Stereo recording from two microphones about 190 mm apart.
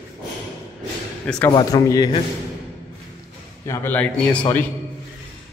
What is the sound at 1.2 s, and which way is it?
Speech, 5° left (ahead or behind).